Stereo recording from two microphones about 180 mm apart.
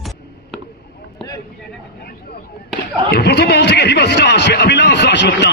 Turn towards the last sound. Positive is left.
turn(degrees=70)  # may be behind; listen again after turning